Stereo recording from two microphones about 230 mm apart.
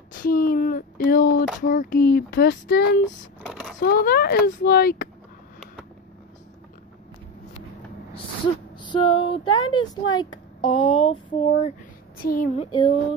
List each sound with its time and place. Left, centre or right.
0.3 s a child's voice: left
3.4 s a sound: centre
3.8 s a child's voice: left
8.7 s speech: centre
12.2 s a child's voice: left
12.5 s speech: left